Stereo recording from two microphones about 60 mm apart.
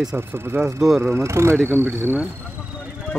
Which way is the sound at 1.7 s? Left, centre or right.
Right.